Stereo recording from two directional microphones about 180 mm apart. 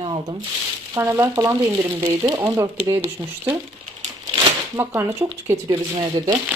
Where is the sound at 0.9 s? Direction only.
15° right (ahead or behind).